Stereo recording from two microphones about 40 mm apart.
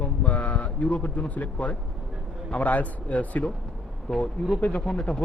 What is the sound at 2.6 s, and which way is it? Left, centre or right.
Speech, left.